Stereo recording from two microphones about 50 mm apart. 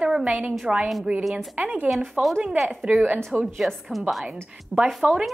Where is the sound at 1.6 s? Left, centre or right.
Right.